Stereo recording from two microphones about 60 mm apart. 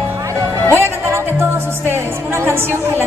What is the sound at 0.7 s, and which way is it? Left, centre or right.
Music, right.